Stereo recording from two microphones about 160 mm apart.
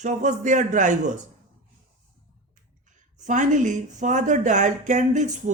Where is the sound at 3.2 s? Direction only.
50° right (ahead or behind).